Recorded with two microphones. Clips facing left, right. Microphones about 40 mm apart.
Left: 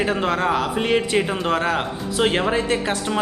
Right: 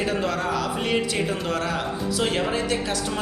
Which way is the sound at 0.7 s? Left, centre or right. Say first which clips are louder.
Left 5 dB; left.